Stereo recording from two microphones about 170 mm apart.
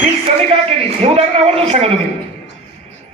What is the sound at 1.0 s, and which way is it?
Speech, 40° right (ahead or behind).